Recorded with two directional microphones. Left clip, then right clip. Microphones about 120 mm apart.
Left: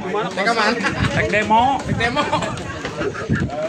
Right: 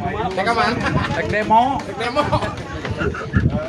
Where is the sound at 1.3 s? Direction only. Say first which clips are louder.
Right 1 dB; 10° right (ahead or behind).